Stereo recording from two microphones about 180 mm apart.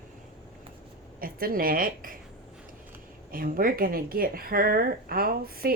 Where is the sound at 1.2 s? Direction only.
55° right (ahead or behind).